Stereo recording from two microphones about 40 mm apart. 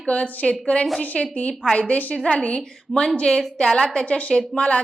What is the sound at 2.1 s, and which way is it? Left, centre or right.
A woman's voice, left.